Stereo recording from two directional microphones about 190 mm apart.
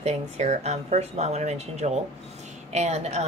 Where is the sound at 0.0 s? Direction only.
35° right (ahead or behind).